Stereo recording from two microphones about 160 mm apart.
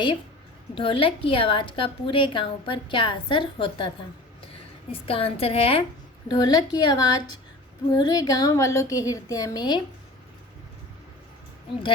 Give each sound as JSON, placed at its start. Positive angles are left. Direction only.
{"t": 0.8, "sound": "a woman's voice", "side_deg": 35}
{"t": 6.2, "sound": "a woman's voice", "side_deg": 25}